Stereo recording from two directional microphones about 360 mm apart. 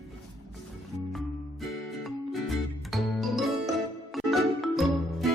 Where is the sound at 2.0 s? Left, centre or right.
Centre.